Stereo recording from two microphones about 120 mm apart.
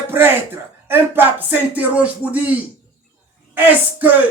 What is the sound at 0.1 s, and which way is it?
Speech, 20° right (ahead or behind).